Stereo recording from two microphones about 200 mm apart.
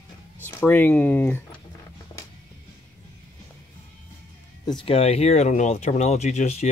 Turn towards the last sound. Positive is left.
turn(degrees=35)  # may be behind; listen again after turning